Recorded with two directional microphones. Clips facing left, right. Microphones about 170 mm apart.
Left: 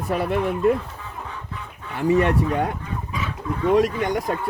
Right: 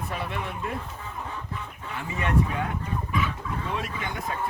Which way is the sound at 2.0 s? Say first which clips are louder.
Left 17 dB; 65° left (ahead or behind).